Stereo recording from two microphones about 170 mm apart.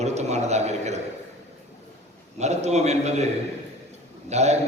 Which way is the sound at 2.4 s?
40° right (ahead or behind).